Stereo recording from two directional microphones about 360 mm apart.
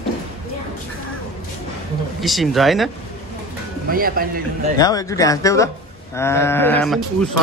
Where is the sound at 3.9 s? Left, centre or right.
Right.